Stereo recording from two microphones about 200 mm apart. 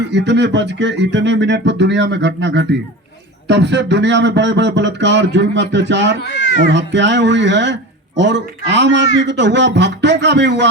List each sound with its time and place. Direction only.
0.1 s speech: 60° right (ahead or behind)
6.2 s speech: 65° left (ahead or behind)
6.7 s speech: 60° right (ahead or behind)